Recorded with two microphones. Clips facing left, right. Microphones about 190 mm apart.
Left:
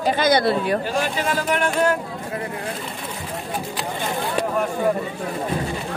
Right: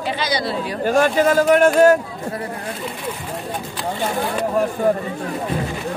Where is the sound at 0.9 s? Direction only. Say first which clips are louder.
Right 8 dB; 45° right (ahead or behind).